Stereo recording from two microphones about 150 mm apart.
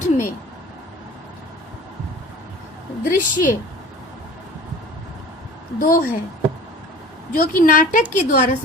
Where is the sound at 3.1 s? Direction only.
60° left (ahead or behind).